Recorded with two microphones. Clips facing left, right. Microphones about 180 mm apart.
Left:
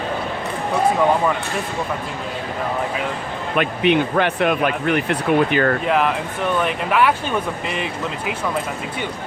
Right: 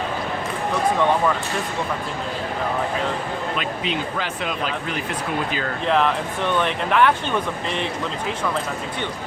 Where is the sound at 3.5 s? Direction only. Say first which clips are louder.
Left 8 dB; 60° left (ahead or behind).